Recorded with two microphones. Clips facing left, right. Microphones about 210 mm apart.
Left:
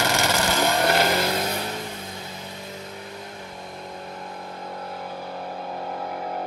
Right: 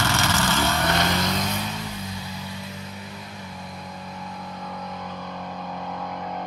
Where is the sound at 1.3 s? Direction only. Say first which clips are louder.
Left 1 dB; 30° left (ahead or behind).